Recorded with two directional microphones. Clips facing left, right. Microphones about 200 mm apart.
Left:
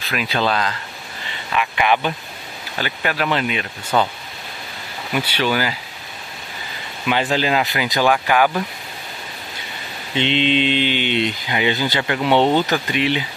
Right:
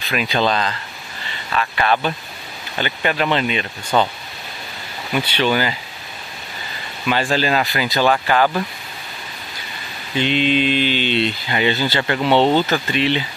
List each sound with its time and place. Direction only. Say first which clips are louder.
0.0 s speech: right 2 dB; centre (ahead or behind)
5.1 s speech: right 2 dB; 10° left (ahead or behind)
7.1 s speech: even; 15° left (ahead or behind)
10.1 s speech: right 1 dB; 25° left (ahead or behind)